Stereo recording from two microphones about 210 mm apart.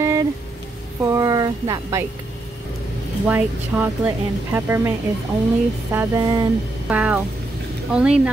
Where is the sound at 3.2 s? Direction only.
10° right (ahead or behind).